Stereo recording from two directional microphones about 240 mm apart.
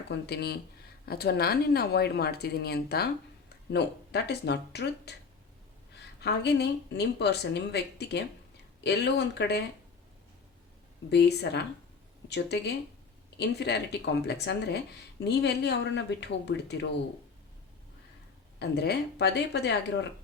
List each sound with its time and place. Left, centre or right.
0.1 s speech: left
6.2 s speech: left
11.1 s speech: left
18.6 s speech: left